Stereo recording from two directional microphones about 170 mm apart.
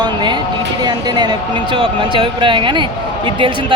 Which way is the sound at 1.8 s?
30° right (ahead or behind).